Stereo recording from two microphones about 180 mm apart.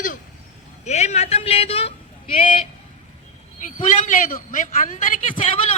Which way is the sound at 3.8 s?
45° left (ahead or behind).